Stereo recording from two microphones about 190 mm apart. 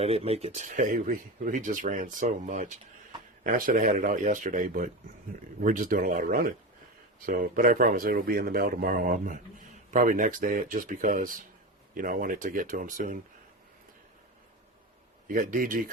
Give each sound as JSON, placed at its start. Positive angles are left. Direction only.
{"t": 0.0, "sound": "speech", "side_deg": -30}
{"t": 15.3, "sound": "speech", "side_deg": -45}